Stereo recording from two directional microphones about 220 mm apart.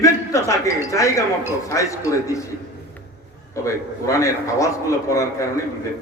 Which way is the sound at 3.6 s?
15° left (ahead or behind).